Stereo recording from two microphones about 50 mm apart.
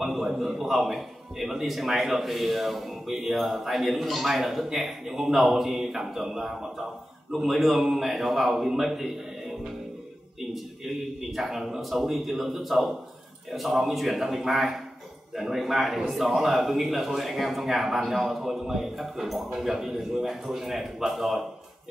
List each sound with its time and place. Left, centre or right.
0.0 s a man's voice: centre
11.1 s a man's voice: centre